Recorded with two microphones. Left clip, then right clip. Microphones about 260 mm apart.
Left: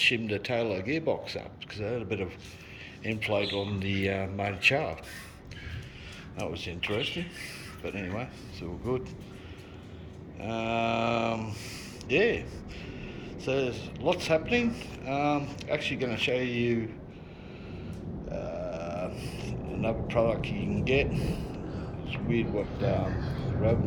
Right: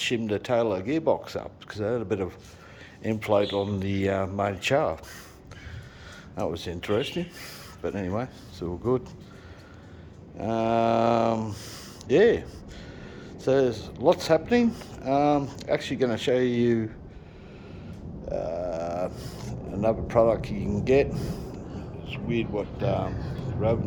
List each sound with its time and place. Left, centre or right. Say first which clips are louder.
0.0 s speech: left 1 dB; centre
3.2 s speech: right 6 dB; centre
6.3 s speech: right 5 dB; right
10.4 s a man's voice: right 6 dB; right
18.3 s a sound: right 6 dB; right
20.7 s speech: right 6 dB; right